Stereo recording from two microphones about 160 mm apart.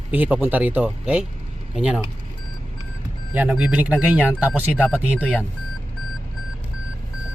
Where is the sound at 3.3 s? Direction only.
5° right (ahead or behind).